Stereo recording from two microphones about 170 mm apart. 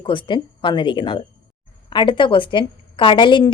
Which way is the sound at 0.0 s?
30° left (ahead or behind).